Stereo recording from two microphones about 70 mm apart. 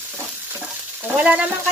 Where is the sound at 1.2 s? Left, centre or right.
Centre.